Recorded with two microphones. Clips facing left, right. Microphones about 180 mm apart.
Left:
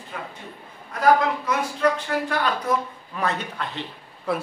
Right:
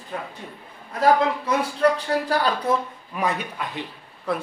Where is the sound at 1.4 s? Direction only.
35° right (ahead or behind).